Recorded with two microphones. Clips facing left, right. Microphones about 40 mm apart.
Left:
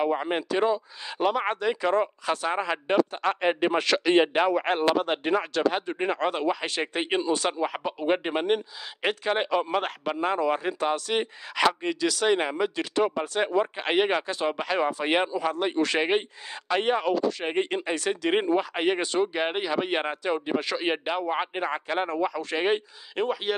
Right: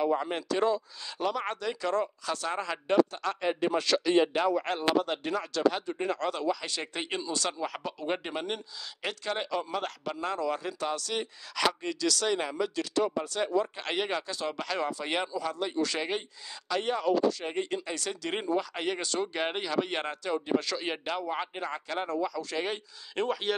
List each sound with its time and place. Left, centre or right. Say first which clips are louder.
0.0 s speech: left 3 dB; left
19.3 s speech: left 3 dB; centre; by 22.8 s left
23.1 s speech: left 3 dB; centre